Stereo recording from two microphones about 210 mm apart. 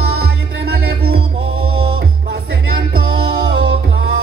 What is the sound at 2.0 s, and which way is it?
Music, 50° right (ahead or behind).